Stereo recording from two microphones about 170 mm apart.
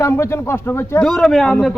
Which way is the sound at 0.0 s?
15° left (ahead or behind).